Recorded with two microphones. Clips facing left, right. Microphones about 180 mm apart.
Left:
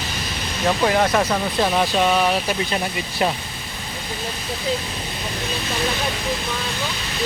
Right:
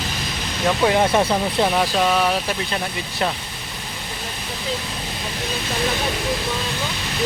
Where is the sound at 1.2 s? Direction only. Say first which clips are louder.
Right 1 dB; 10° right (ahead or behind).